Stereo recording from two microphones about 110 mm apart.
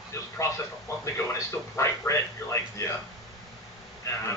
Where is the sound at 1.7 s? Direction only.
25° left (ahead or behind).